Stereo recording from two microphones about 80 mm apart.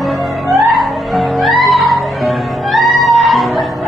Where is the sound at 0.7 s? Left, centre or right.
Centre.